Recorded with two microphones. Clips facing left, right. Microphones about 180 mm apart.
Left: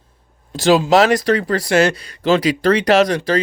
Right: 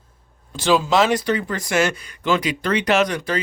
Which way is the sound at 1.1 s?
90° left.